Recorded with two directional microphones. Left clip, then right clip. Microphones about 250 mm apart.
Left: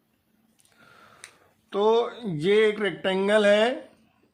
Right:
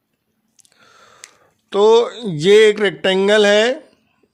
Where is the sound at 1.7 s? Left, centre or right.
Right.